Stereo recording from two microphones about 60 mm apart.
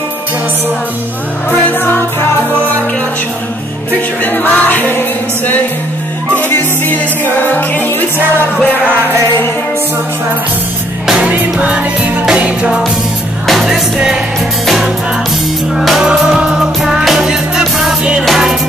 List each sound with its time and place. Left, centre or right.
1.5 s music: left
4.2 s music: left
6.5 s music: left
11.1 s music: right
15.7 s music: centre
16.1 s music: centre